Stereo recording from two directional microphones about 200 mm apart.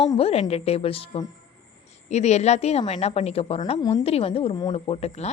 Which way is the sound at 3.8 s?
20° left (ahead or behind).